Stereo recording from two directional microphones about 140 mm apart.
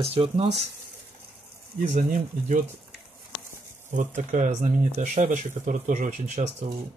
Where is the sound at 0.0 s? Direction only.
45° right (ahead or behind).